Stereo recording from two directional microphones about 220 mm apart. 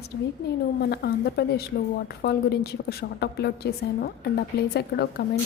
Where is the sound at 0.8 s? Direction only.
50° left (ahead or behind).